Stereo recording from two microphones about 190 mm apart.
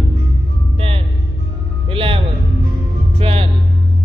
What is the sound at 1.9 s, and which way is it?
Music, 30° right (ahead or behind).